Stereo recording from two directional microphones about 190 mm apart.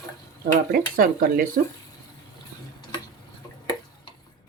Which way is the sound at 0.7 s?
50° right (ahead or behind).